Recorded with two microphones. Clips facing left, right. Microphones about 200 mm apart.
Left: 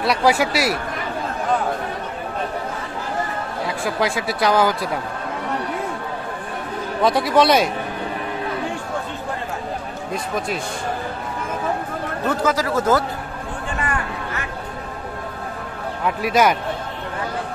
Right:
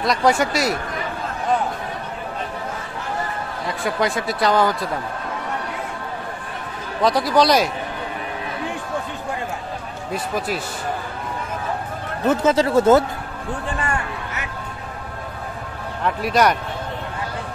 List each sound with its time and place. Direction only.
0.0 s speech: 5° left (ahead or behind)
3.6 s speech: centre (ahead or behind)
7.0 s speech: centre (ahead or behind)
10.1 s speech: 5° right (ahead or behind)
12.3 s speech: 25° right (ahead or behind)
13.7 s a sound: 30° right (ahead or behind)
16.0 s speech: 5° left (ahead or behind)